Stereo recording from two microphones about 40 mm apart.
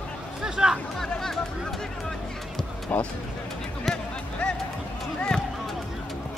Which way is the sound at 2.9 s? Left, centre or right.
Left.